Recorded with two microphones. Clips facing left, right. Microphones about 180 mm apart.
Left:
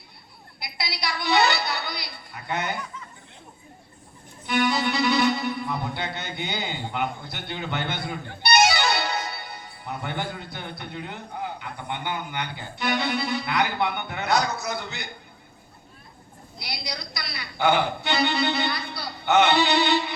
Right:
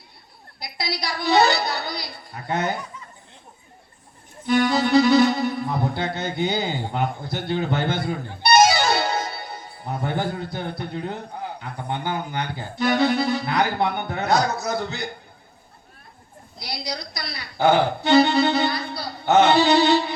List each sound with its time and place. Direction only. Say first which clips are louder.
0.6 s accordion: right 3 dB; 40° right (ahead or behind)
4.4 s music: right 4 dB; 40° right (ahead or behind)
11.6 s accordion: right 4 dB; 40° right (ahead or behind)
16.6 s accordion: right 4 dB; 35° right (ahead or behind)